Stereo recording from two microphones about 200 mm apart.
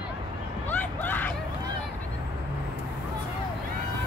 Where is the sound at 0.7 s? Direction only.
10° left (ahead or behind).